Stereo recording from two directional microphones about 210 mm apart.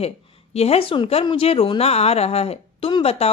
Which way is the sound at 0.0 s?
30° left (ahead or behind).